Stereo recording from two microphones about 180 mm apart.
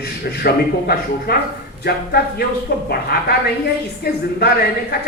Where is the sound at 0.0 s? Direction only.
60° left (ahead or behind).